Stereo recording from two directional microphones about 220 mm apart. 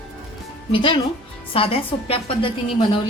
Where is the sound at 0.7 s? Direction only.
20° left (ahead or behind).